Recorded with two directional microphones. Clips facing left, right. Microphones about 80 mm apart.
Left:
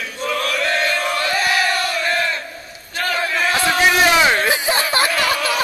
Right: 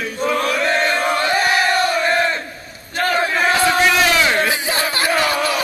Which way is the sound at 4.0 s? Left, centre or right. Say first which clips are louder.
Left 1 dB; centre.